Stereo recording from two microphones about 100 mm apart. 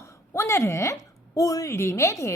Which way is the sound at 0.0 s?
30° left (ahead or behind).